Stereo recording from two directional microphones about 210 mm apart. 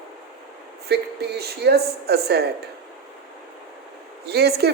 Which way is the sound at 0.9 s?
50° right (ahead or behind).